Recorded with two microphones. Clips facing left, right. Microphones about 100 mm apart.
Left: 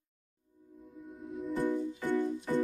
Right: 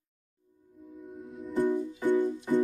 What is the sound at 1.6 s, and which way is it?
Music, 15° right (ahead or behind).